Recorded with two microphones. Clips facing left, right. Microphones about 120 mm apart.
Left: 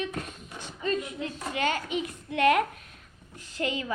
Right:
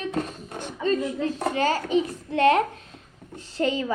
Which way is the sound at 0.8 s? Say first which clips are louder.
Right 6 dB; 35° right (ahead or behind).